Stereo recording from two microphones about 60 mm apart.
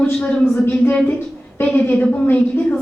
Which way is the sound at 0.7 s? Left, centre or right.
Left.